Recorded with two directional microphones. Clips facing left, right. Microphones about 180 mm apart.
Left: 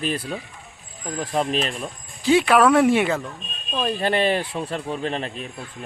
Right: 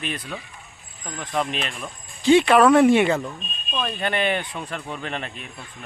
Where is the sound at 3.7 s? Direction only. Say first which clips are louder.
Left 4 dB; 30° left (ahead or behind).